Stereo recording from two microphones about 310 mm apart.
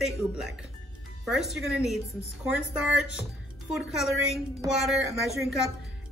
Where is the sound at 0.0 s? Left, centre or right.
Centre.